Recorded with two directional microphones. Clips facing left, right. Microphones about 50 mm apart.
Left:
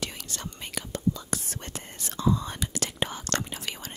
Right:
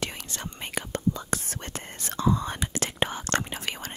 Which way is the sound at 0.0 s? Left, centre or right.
Right.